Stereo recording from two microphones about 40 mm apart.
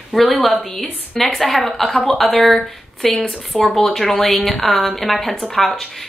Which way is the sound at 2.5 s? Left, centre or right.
Centre.